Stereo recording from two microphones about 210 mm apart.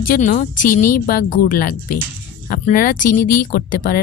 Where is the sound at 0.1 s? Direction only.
35° left (ahead or behind).